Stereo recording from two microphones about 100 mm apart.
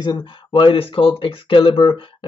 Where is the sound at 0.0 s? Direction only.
50° left (ahead or behind).